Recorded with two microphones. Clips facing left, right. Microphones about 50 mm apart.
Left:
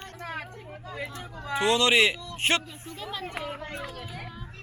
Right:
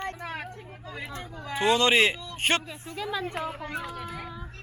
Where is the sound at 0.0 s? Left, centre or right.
Right.